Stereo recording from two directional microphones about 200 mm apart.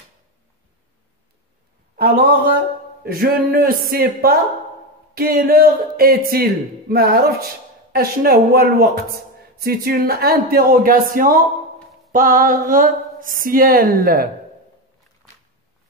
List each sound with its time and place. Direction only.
2.0 s a man's voice: 45° right (ahead or behind)